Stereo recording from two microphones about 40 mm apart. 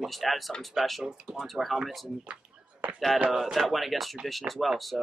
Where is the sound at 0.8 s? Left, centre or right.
Centre.